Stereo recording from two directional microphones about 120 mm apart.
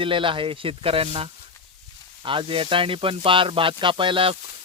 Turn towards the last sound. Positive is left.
turn(degrees=-45)  # may be behind; listen again after turning